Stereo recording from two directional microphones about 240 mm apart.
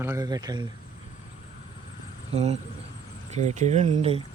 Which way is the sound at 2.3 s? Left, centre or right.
Right.